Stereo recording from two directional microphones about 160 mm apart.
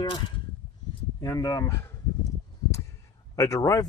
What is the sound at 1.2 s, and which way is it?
Speech, 20° left (ahead or behind).